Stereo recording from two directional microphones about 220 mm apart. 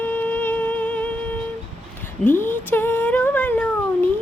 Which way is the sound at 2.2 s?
10° left (ahead or behind).